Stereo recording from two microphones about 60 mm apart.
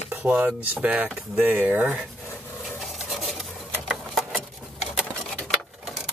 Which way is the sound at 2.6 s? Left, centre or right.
Centre.